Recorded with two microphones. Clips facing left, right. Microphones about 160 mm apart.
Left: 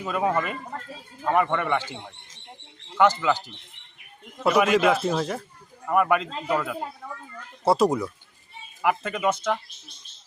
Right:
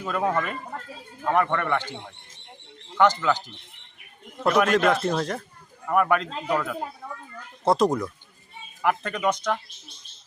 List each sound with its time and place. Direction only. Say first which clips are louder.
0.0 s speech: left 1 dB; 5° left (ahead or behind)